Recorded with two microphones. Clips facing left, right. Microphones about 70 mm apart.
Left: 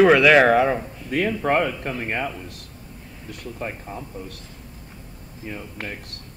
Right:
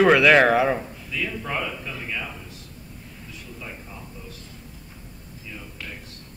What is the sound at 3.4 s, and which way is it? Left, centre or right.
Speech, left.